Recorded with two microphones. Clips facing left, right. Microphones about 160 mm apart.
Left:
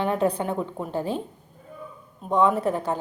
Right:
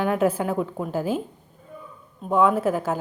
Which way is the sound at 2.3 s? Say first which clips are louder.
Right 1 dB; 5° right (ahead or behind).